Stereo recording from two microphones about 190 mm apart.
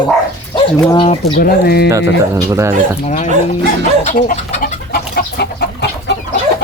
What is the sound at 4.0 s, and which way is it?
Speech, 45° left (ahead or behind).